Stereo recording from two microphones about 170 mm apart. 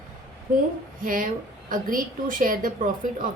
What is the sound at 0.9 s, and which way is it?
A woman's voice, 50° right (ahead or behind).